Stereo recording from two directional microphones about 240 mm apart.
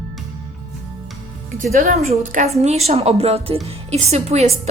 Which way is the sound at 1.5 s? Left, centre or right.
Right.